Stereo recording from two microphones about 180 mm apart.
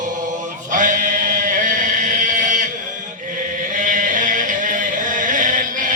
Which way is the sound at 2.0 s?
45° right (ahead or behind).